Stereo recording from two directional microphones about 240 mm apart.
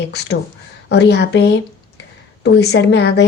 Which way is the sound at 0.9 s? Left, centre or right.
Left.